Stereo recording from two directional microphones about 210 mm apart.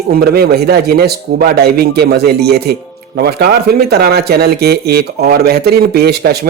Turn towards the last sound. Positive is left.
turn(degrees=-50)  # may be behind; listen again after turning